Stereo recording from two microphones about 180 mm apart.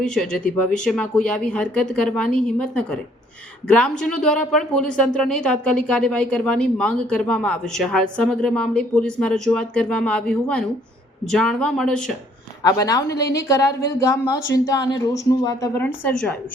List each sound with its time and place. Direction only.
0.0 s speech: 5° left (ahead or behind)
12.6 s a woman's voice: 20° left (ahead or behind)